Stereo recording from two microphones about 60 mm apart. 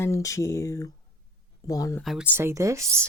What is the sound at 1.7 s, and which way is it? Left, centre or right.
Speech, left.